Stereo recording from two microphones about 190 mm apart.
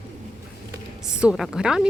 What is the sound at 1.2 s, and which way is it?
Speech, 5° right (ahead or behind).